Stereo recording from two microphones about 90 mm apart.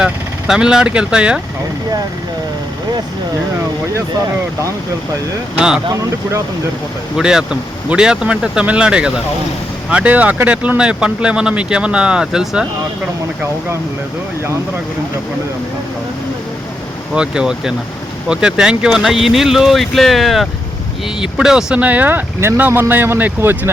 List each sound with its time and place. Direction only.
0.0 s speech: 10° right (ahead or behind)
5.5 s speech: 10° right (ahead or behind)
5.9 s speech: 35° right (ahead or behind)
7.2 s speech: 10° right (ahead or behind)
17.2 s speech: 10° right (ahead or behind); by 23.7 s 25° right (ahead or behind)